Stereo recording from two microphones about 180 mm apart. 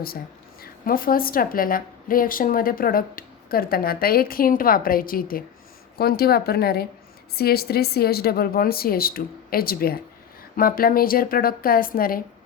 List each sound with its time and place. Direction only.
0.6 s a woman's voice: 55° left (ahead or behind)